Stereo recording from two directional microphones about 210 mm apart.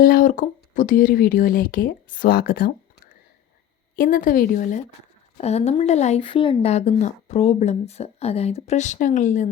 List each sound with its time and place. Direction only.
0.0 s speech: 40° left (ahead or behind)
3.9 s speech: 40° left (ahead or behind)